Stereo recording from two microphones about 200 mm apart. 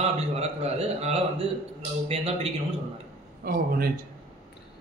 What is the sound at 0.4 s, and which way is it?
A man's voice, 30° right (ahead or behind).